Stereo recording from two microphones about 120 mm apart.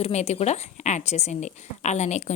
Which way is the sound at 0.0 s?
65° left (ahead or behind).